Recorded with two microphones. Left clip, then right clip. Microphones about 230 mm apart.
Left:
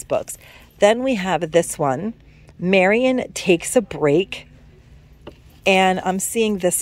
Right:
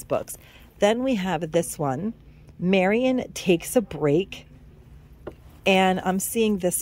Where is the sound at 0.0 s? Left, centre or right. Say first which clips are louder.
Left 4 dB; centre.